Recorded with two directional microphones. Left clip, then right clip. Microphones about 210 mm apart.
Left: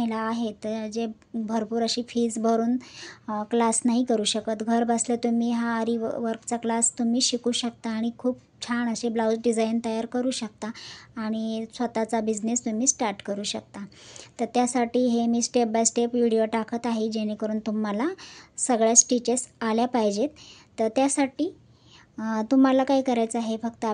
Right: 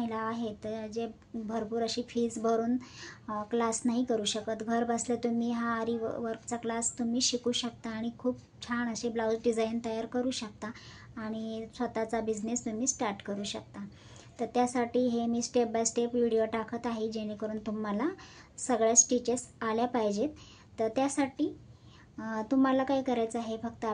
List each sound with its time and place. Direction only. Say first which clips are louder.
0.0 s a woman's voice: left 6 dB; 45° left (ahead or behind)